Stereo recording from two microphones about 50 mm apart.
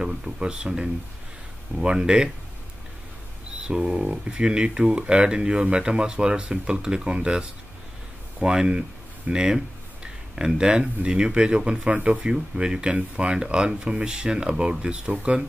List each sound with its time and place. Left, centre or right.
0.0 s speech: centre
2.0 s speech: centre
3.6 s speech: centre